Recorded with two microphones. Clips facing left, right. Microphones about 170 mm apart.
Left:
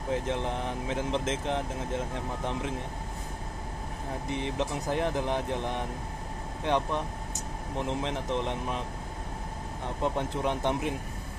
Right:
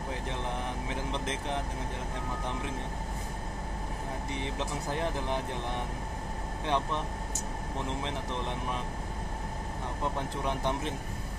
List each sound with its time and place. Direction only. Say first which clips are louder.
0.8 s speech: left 5 dB; 20° left (ahead or behind)
4.4 s speech: left 5 dB; 20° left (ahead or behind)
6.6 s speech: left 3 dB; 15° left (ahead or behind)
10.0 s speech: left 4 dB; 20° left (ahead or behind)